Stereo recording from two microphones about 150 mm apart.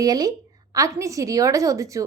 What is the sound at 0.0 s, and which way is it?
A woman's voice, 25° right (ahead or behind).